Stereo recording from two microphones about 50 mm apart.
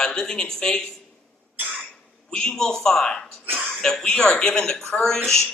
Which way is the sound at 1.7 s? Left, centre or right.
Centre.